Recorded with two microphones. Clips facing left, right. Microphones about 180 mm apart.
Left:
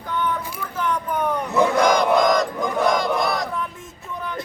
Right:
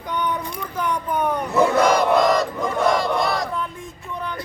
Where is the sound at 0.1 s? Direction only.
15° right (ahead or behind); by 3.5 s centre (ahead or behind).